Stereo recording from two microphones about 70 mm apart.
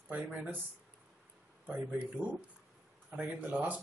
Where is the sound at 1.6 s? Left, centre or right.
Right.